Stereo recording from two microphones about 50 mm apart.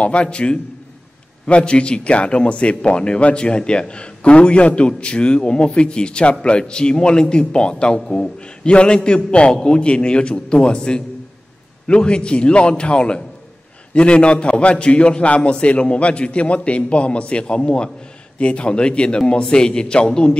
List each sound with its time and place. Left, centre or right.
0.0 s speech: left